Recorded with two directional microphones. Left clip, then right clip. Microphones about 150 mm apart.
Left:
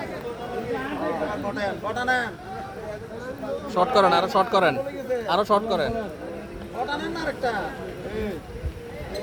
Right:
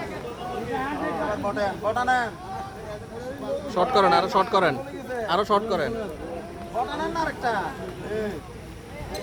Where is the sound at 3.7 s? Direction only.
10° left (ahead or behind).